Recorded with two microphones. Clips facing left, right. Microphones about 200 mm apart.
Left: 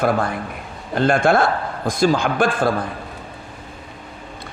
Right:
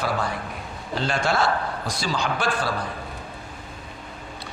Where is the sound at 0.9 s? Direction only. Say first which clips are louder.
Left 8 dB; 55° left (ahead or behind).